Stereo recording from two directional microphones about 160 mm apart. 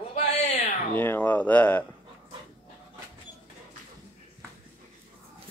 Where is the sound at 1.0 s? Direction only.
10° left (ahead or behind).